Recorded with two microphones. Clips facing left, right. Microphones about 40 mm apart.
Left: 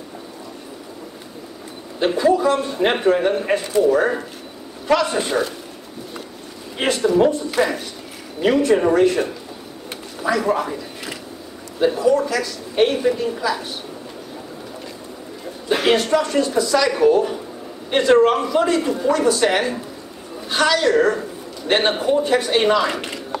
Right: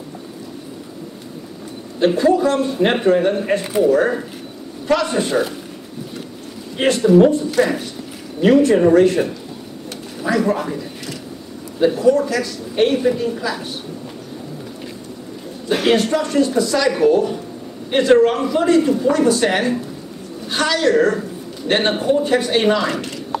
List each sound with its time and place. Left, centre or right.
2.0 s a woman's voice: centre
6.8 s a woman's voice: centre
11.8 s a woman's voice: centre
15.7 s a woman's voice: centre
22.9 s speech: left